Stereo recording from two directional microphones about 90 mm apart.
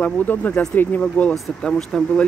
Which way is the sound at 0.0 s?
15° left (ahead or behind).